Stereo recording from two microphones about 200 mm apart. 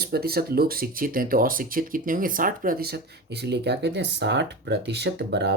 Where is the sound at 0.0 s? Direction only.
50° right (ahead or behind).